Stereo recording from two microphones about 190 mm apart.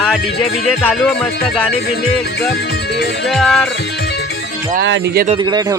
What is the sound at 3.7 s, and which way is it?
Music, 60° left (ahead or behind).